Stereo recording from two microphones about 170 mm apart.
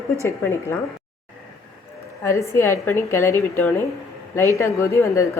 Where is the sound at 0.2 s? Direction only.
15° left (ahead or behind).